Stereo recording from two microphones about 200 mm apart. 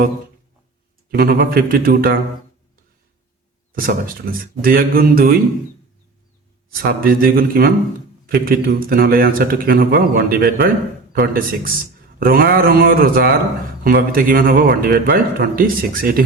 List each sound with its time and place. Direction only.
1.1 s a man's voice: 50° right (ahead or behind)
3.7 s a man's voice: 45° right (ahead or behind)
6.8 s a man's voice: 45° right (ahead or behind)